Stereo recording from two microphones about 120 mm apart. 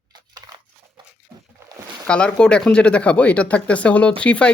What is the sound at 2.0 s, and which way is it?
Speech, 10° left (ahead or behind).